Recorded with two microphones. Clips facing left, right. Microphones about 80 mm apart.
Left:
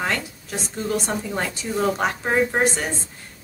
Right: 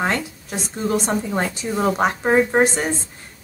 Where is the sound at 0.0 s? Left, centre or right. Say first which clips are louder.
Right 3 dB; right.